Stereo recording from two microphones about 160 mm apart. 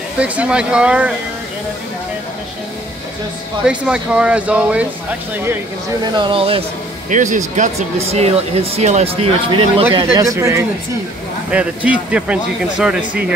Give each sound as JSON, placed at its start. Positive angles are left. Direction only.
{"t": 0.2, "sound": "speech", "side_deg": -5}
{"t": 3.6, "sound": "speech", "side_deg": -5}
{"t": 6.1, "sound": "speech", "side_deg": -30}
{"t": 7.1, "sound": "speech", "side_deg": -50}
{"t": 8.1, "sound": "speech", "side_deg": -40}
{"t": 10.1, "sound": "speech", "side_deg": -20}
{"t": 11.5, "sound": "speech", "side_deg": -10}